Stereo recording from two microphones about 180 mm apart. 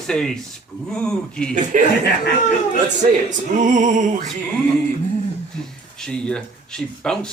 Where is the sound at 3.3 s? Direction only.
45° right (ahead or behind).